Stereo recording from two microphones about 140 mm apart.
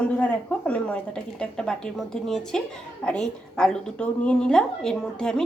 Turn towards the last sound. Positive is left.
turn(degrees=5)  # may be behind; listen again after turning